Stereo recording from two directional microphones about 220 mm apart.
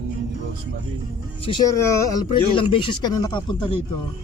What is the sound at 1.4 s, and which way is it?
Speech, 20° left (ahead or behind).